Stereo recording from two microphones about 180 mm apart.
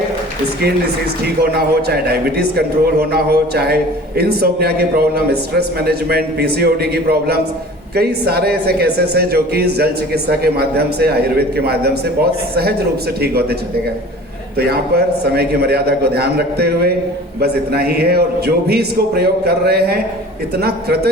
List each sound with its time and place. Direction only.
1.2 s speech: 60° right (ahead or behind)
14.6 s a man's voice: 60° right (ahead or behind)